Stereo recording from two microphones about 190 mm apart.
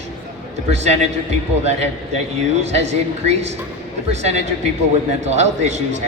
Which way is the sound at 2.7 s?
35° right (ahead or behind).